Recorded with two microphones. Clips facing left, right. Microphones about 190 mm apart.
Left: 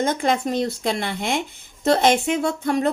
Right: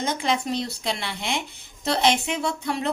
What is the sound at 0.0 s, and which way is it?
Speech, 50° left (ahead or behind).